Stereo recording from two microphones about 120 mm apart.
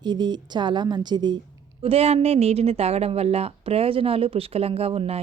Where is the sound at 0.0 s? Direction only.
35° right (ahead or behind).